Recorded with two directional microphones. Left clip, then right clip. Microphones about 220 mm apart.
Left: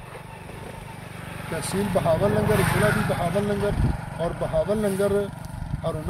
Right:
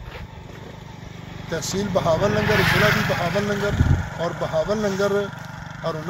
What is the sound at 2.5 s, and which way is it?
Speech, 25° right (ahead or behind).